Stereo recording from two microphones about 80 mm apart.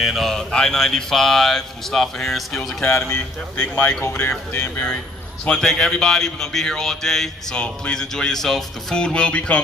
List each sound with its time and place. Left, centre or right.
0.0 s speech: centre
2.9 s speech: left
5.4 s a man's voice: centre